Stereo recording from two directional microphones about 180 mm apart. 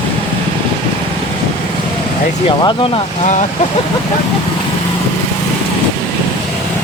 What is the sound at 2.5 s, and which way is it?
Speech, 30° left (ahead or behind).